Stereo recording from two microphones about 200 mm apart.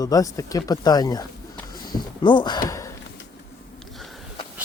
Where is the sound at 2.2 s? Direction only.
20° left (ahead or behind).